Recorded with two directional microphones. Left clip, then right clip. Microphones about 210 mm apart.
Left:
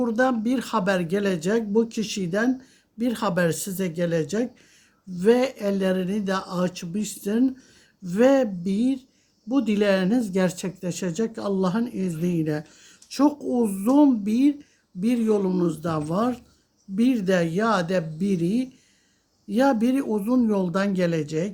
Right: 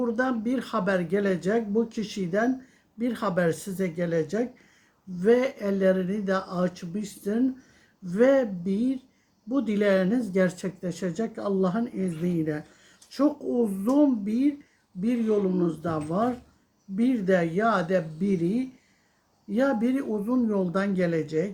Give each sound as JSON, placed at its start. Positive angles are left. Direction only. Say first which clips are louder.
{"t": 0.0, "sound": "speech", "louder": "left 4 dB", "side_deg": 45}